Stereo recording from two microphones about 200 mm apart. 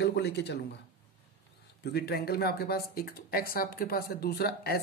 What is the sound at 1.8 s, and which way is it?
Speech, 55° left (ahead or behind).